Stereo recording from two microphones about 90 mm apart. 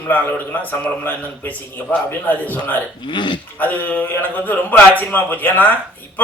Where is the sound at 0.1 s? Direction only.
20° left (ahead or behind).